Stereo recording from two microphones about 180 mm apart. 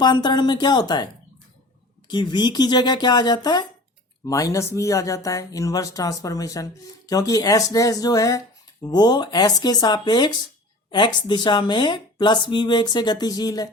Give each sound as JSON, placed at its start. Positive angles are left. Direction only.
{"t": 0.0, "sound": "speech", "side_deg": 25}
{"t": 2.0, "sound": "speech", "side_deg": 25}